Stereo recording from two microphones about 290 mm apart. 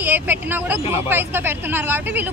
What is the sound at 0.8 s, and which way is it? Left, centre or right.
Speech, left.